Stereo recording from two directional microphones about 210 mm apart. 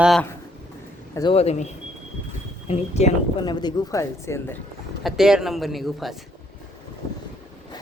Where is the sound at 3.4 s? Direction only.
20° left (ahead or behind).